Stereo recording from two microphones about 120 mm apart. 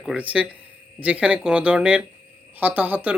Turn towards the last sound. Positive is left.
turn(degrees=-15)  # may be behind; listen again after turning